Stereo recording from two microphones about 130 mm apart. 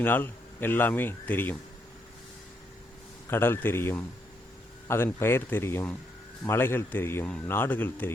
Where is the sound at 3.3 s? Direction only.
15° left (ahead or behind).